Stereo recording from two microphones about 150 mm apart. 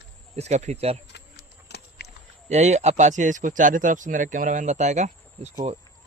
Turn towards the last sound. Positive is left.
turn(degrees=-50)  # may be behind; listen again after turning